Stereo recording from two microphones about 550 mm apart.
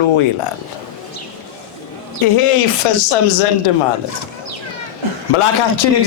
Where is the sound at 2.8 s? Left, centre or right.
Left.